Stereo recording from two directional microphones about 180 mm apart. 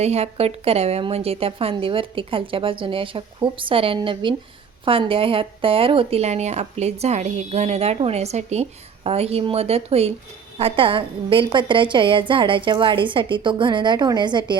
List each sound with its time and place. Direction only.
0.0 s a woman's voice: 35° right (ahead or behind)